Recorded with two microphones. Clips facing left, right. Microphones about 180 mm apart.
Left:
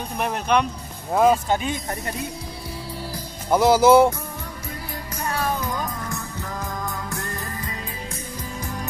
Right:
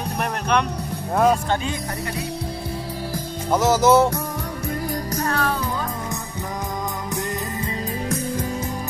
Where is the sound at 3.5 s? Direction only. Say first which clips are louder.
Left 2 dB; 10° left (ahead or behind).